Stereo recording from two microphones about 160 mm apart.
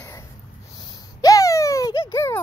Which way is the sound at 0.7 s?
25° left (ahead or behind).